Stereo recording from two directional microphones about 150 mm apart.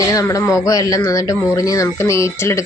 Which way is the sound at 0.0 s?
20° left (ahead or behind).